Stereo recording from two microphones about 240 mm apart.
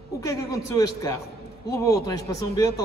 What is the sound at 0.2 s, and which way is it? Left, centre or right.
A man's voice, centre.